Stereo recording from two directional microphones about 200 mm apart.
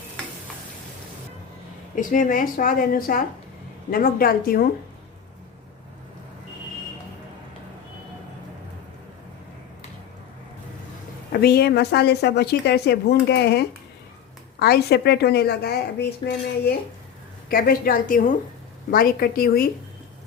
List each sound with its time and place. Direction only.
2.0 s a woman's voice: 40° left (ahead or behind)
11.3 s a woman's voice: 50° left (ahead or behind)